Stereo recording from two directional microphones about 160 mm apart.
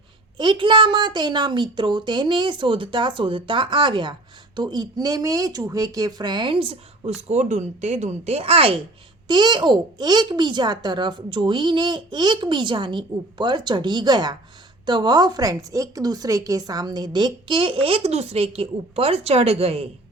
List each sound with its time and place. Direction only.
0.3 s a woman's voice: 30° right (ahead or behind)